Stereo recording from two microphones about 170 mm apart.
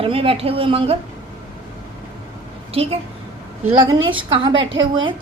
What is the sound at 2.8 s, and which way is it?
Speech, 35° right (ahead or behind).